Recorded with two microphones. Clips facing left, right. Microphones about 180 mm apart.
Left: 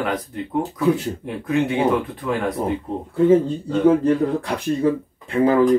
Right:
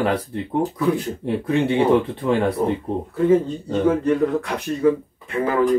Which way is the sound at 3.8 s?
30° left (ahead or behind).